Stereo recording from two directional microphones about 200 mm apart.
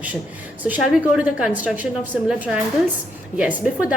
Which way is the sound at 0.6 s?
5° right (ahead or behind).